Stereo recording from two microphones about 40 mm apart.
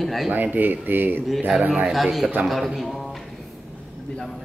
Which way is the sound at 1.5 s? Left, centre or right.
Centre.